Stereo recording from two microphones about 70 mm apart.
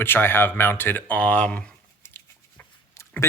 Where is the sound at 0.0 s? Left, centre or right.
Left.